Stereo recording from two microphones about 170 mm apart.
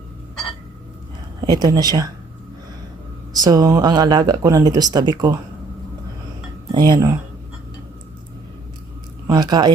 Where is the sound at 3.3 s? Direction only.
25° right (ahead or behind).